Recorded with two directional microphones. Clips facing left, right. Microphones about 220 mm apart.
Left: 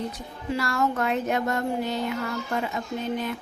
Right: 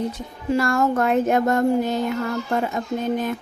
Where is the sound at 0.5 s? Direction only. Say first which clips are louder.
Right 6 dB; 50° right (ahead or behind).